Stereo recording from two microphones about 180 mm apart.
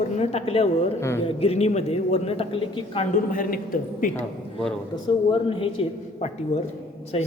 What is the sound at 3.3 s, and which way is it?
Speech, 50° left (ahead or behind).